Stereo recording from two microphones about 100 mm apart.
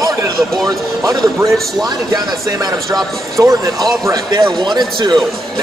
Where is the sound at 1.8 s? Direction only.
40° right (ahead or behind).